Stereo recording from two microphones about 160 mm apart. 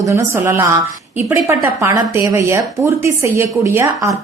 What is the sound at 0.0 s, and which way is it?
A woman's voice, 20° right (ahead or behind).